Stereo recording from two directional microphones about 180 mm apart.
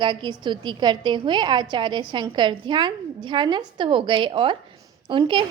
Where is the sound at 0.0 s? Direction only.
25° right (ahead or behind).